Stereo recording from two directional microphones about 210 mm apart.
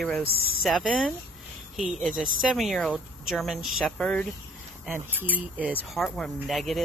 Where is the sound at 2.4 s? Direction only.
Centre (ahead or behind).